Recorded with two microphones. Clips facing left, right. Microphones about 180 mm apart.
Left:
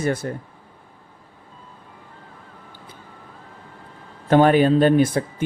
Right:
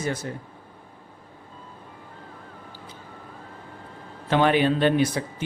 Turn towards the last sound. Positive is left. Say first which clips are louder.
# left 5 dB
turn(degrees=50)  # may be behind; listen again after turning